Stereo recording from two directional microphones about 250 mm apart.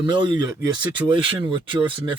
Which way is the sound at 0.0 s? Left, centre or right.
Centre.